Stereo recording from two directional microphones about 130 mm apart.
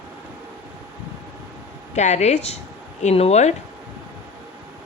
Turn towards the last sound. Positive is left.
turn(degrees=55)  # may be behind; listen again after turning